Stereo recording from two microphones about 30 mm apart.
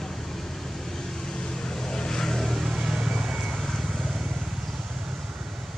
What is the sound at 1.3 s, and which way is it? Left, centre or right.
Vehicle, left.